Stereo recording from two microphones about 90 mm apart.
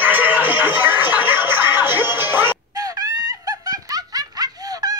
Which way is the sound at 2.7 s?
45° right (ahead or behind).